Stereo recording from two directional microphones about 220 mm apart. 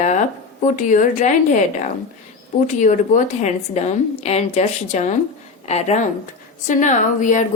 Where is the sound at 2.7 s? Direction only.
35° left (ahead or behind).